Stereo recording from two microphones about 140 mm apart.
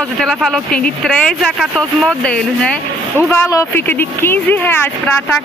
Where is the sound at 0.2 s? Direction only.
Centre (ahead or behind).